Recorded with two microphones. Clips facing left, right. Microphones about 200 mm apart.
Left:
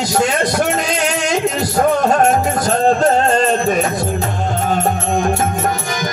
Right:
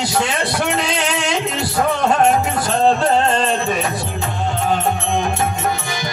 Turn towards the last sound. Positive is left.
turn(degrees=45)  # may be behind; listen again after turning